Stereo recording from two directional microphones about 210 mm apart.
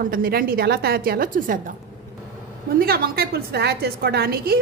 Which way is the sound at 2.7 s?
45° right (ahead or behind).